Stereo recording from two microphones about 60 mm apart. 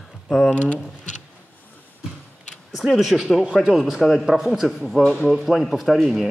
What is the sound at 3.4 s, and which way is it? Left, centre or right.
A man's voice, centre.